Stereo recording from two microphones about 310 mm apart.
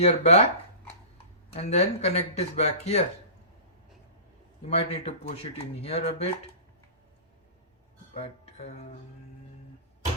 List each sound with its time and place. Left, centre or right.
0.0 s speech: centre
1.5 s speech: left
4.6 s speech: centre
8.1 s music: centre